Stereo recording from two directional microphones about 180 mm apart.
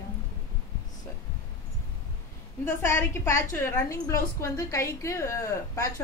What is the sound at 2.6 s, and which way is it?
A woman's voice, 10° left (ahead or behind).